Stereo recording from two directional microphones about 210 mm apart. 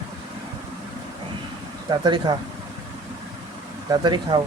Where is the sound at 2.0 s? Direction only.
20° right (ahead or behind).